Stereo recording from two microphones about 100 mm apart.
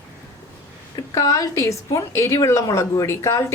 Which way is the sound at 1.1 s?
35° left (ahead or behind).